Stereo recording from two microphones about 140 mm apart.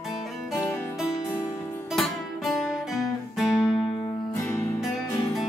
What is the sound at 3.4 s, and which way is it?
Music, 20° left (ahead or behind).